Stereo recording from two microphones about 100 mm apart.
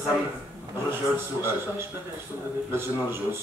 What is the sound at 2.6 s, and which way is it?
Speech, 25° right (ahead or behind).